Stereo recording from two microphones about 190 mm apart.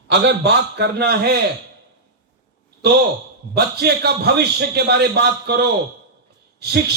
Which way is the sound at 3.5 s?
60° right (ahead or behind).